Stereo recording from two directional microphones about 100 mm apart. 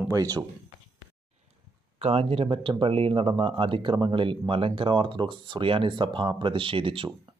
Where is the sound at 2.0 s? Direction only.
90° right.